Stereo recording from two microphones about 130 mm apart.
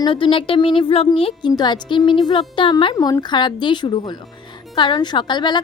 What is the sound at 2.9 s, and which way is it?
A woman's voice, 30° left (ahead or behind).